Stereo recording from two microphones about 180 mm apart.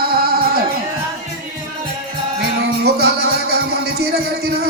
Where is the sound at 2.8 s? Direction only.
65° right (ahead or behind).